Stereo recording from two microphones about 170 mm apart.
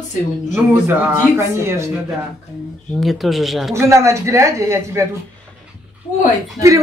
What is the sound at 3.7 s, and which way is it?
A woman's voice, 15° right (ahead or behind).